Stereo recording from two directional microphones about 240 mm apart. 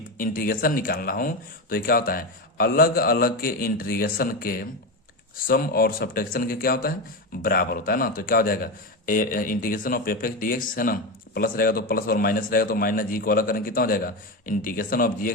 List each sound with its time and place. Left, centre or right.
0.2 s speech: left